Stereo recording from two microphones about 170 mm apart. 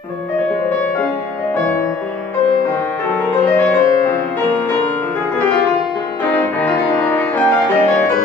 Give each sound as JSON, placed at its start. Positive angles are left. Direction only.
{"t": 3.4, "sound": "music", "side_deg": 15}
{"t": 6.6, "sound": "music", "side_deg": 10}